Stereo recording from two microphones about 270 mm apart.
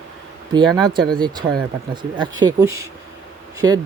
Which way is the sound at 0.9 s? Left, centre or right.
Centre.